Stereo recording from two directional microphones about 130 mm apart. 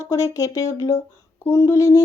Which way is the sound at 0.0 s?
25° left (ahead or behind).